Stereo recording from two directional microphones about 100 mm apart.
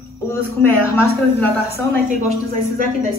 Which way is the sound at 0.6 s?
20° left (ahead or behind).